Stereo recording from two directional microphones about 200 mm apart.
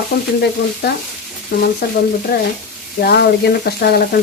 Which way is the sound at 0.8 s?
55° left (ahead or behind).